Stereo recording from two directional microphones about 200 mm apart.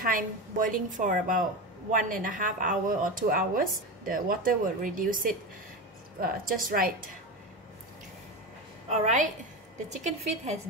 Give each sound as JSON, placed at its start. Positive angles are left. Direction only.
{"t": 0.0, "sound": "speech", "side_deg": -45}
{"t": 8.8, "sound": "a woman's voice", "side_deg": -35}